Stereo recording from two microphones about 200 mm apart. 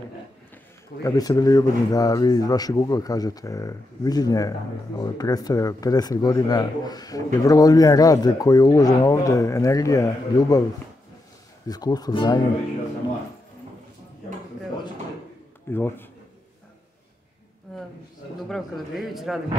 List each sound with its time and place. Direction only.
1.0 s speech: 20° left (ahead or behind)
11.6 s speech: 20° left (ahead or behind)
15.7 s speech: 10° left (ahead or behind)
18.5 s a man's voice: centre (ahead or behind)